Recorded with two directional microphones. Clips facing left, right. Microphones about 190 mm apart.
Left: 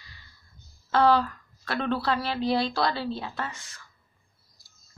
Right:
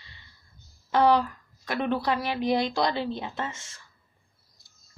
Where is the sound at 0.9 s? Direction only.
15° right (ahead or behind).